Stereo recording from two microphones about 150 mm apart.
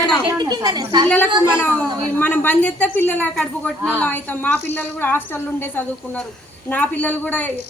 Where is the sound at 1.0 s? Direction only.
10° left (ahead or behind).